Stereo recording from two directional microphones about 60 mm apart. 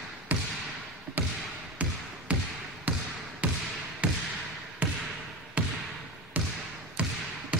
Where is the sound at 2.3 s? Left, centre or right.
Centre.